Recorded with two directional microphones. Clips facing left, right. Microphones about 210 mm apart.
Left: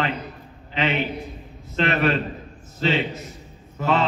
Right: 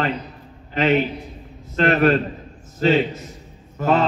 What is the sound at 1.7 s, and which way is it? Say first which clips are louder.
A man's voice: right 5 dB; 45° right (ahead or behind).